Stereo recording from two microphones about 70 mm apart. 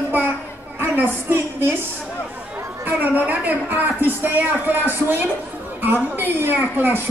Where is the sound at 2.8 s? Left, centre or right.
Right.